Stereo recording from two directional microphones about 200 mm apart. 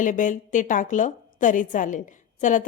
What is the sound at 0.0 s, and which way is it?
A woman's voice, 40° left (ahead or behind).